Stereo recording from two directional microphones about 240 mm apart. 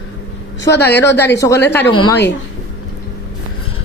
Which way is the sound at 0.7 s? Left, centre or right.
Centre.